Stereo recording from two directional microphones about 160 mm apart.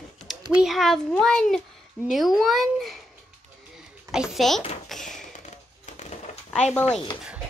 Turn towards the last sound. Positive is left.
turn(degrees=5)  # may be behind; listen again after turning